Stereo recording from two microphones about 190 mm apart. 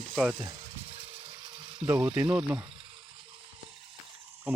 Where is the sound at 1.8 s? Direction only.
5° right (ahead or behind).